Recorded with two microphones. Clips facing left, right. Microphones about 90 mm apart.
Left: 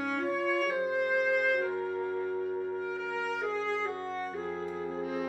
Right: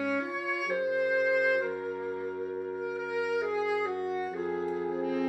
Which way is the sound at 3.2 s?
10° right (ahead or behind).